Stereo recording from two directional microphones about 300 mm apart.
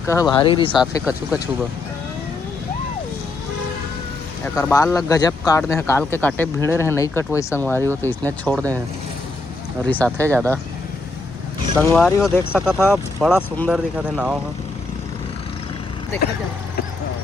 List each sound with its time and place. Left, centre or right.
0.1 s speech: centre
4.4 s speech: centre
9.8 s speech: centre
11.9 s speech: centre